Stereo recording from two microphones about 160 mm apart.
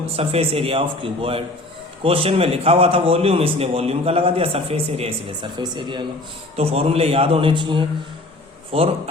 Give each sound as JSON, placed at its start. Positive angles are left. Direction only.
{"t": 0.0, "sound": "a man's voice", "side_deg": -40}